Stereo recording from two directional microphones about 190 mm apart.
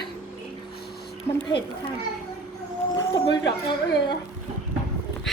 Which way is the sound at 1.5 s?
25° left (ahead or behind).